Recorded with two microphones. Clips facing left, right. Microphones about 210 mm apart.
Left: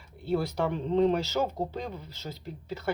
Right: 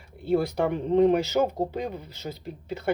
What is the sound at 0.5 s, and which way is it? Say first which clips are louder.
Speech: right 4 dB; 15° right (ahead or behind).